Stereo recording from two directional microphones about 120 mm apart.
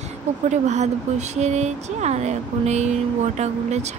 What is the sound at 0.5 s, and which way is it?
Speech, 75° right (ahead or behind).